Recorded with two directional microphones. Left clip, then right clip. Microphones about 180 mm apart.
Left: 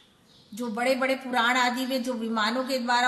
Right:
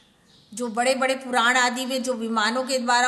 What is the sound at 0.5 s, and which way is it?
A woman's voice, 35° right (ahead or behind).